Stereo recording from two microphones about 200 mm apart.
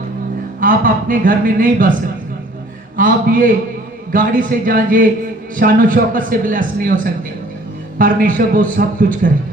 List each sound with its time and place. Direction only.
0.6 s a man's voice: 45° right (ahead or behind)
3.0 s a man's voice: 45° right (ahead or behind)